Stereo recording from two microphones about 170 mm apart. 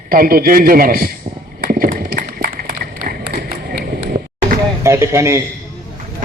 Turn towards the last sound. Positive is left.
turn(degrees=-15)  # may be behind; listen again after turning